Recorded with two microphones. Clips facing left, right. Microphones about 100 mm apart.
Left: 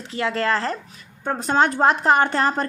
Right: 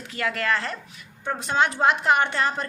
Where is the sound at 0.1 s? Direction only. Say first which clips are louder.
Left 4 dB; 25° left (ahead or behind).